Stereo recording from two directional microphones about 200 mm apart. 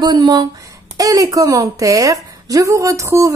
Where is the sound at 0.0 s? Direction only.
20° right (ahead or behind).